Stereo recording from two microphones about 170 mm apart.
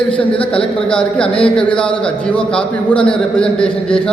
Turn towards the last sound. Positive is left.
turn(degrees=5)  # may be behind; listen again after turning